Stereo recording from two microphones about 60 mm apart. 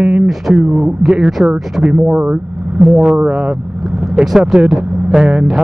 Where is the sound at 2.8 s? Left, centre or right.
Centre.